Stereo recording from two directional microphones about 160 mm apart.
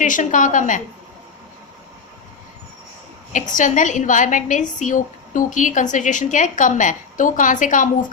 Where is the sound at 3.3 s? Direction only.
55° left (ahead or behind).